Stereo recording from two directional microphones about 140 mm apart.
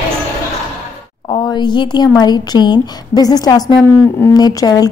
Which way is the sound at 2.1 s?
30° left (ahead or behind).